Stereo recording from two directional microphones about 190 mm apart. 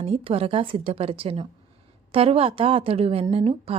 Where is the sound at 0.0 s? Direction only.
30° right (ahead or behind).